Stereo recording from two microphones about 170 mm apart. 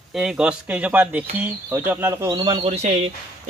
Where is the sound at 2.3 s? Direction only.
30° right (ahead or behind).